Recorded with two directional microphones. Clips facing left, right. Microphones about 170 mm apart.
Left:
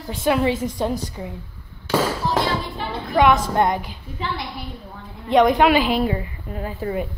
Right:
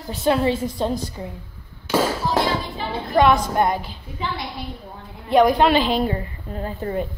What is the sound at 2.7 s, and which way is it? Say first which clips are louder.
Speech: right 1 dB; 5° right (ahead or behind).